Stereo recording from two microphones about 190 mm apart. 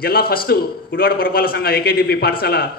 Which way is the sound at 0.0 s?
50° left (ahead or behind).